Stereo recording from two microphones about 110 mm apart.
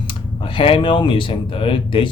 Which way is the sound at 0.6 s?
50° left (ahead or behind).